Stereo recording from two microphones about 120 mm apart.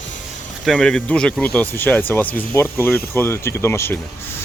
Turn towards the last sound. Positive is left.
turn(degrees=20)  # may be behind; listen again after turning